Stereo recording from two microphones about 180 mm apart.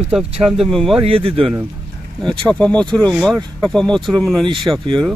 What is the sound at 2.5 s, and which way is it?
Speech, 5° left (ahead or behind).